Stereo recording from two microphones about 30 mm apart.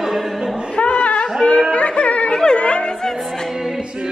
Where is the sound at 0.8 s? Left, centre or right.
Left.